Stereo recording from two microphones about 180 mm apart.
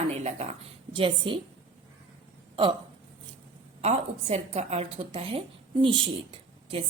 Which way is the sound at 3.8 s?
35° right (ahead or behind).